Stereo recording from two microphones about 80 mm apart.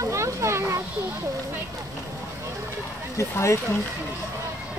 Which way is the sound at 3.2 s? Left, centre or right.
Left.